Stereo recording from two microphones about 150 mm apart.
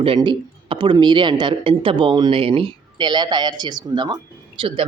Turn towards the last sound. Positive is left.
turn(degrees=-35)  # may be behind; listen again after turning